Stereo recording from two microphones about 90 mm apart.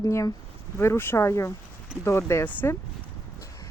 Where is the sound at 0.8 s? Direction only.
25° left (ahead or behind).